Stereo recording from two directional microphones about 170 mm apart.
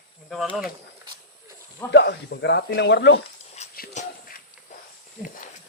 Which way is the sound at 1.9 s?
80° left.